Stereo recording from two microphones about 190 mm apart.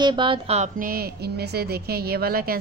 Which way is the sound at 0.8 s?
50° right (ahead or behind).